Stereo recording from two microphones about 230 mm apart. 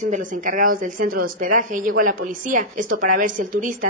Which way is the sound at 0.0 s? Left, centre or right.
Right.